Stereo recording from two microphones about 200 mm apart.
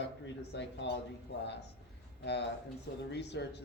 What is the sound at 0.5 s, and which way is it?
Speech, 60° left (ahead or behind).